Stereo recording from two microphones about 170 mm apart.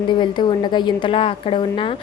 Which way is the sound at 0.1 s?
25° left (ahead or behind).